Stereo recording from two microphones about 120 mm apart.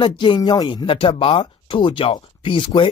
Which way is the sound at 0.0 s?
40° left (ahead or behind).